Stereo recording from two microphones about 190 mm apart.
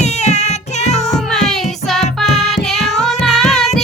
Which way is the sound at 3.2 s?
5° left (ahead or behind).